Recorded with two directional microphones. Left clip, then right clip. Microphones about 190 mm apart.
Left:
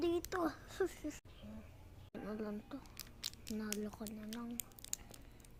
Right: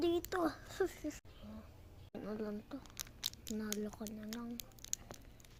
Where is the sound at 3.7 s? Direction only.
15° right (ahead or behind).